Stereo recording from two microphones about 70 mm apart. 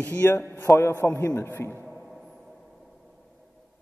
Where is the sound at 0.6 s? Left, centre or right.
Left.